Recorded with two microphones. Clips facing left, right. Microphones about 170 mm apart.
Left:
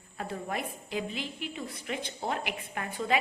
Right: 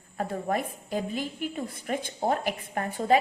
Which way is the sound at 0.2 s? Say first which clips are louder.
Right 6 dB; 45° right (ahead or behind).